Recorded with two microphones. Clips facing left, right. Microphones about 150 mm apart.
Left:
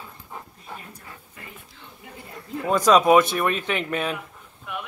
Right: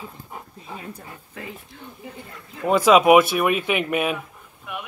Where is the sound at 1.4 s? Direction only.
90° right.